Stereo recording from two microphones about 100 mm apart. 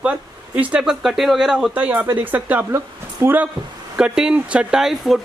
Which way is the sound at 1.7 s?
15° right (ahead or behind).